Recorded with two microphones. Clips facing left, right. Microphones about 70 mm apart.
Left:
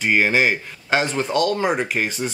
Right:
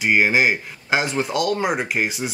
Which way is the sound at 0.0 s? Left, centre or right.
Centre.